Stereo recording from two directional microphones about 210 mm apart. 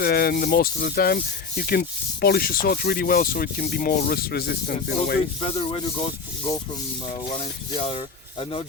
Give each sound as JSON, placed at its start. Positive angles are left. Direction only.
{"t": 0.0, "sound": "sanding", "side_deg": 45}
{"t": 5.4, "sound": "speech", "side_deg": 25}
{"t": 7.3, "sound": "speech", "side_deg": 25}